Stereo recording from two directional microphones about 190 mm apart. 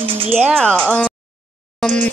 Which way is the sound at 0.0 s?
30° right (ahead or behind).